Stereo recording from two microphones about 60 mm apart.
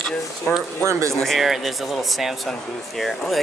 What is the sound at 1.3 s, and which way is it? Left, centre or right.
Speech, centre.